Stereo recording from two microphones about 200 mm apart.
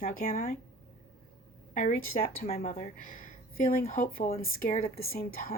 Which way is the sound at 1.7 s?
40° left (ahead or behind).